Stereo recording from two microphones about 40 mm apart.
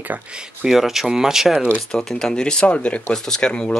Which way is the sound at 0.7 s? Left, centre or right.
Centre.